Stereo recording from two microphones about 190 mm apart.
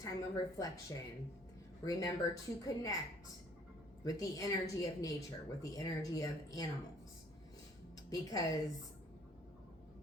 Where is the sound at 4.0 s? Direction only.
20° left (ahead or behind).